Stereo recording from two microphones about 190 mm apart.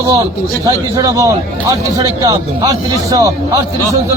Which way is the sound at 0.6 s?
20° right (ahead or behind).